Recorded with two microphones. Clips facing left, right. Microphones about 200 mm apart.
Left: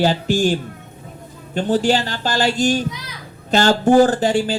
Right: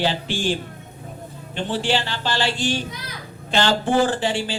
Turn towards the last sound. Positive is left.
turn(degrees=45)  # may be behind; listen again after turning